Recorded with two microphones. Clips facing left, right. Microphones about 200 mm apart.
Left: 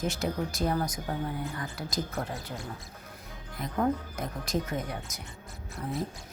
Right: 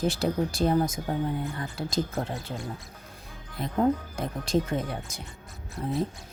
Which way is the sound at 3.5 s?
30° right (ahead or behind).